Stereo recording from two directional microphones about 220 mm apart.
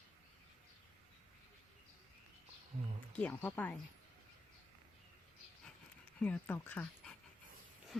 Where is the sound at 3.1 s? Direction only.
5° left (ahead or behind).